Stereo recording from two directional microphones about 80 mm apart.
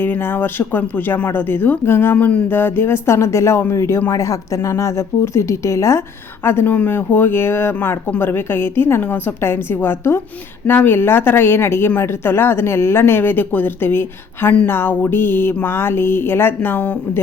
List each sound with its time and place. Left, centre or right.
0.0 s speech: left
2.1 s speech: centre